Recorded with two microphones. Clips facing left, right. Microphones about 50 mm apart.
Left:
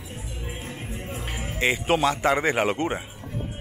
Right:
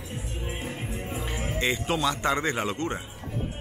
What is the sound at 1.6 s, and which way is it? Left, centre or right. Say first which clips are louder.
A man's voice: left 5 dB; centre.